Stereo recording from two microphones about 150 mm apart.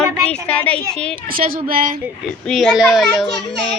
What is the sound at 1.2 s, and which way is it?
Speech, 70° right (ahead or behind).